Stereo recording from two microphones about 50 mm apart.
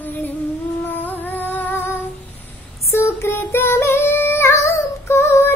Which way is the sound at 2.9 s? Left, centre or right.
Left.